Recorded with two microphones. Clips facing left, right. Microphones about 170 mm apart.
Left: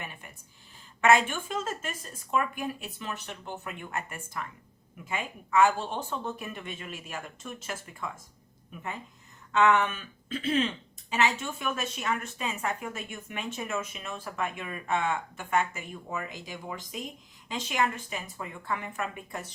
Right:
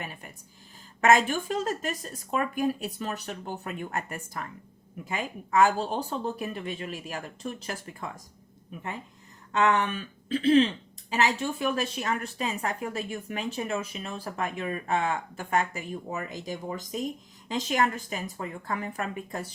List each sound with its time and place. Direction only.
0.0 s a woman's voice: 40° right (ahead or behind)
9.5 s a woman's voice: 35° right (ahead or behind)